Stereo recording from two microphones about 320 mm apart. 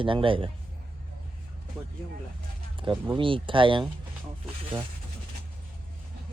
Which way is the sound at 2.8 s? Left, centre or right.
Centre.